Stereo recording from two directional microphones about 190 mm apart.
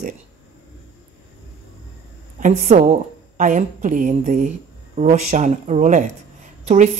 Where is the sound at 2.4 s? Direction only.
40° right (ahead or behind).